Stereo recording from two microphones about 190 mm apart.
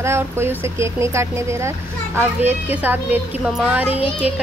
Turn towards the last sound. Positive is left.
turn(degrees=-10)  # may be behind; listen again after turning